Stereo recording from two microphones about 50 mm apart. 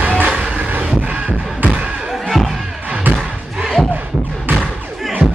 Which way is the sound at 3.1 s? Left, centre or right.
Right.